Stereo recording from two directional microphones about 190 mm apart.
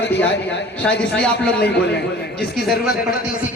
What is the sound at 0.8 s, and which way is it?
Speech, 5° left (ahead or behind).